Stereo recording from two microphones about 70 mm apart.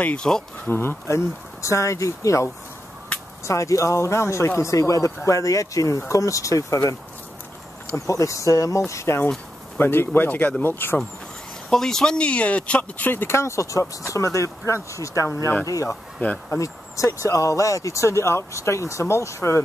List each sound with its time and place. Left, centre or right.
0.0 s speech: centre
0.7 s speech: left
11.7 s speech: centre; by 19.6 s left